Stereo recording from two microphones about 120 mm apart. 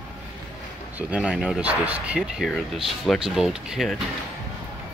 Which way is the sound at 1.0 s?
10° right (ahead or behind).